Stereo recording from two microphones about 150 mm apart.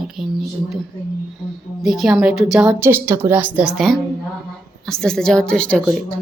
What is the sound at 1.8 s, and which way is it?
A woman's voice, centre (ahead or behind).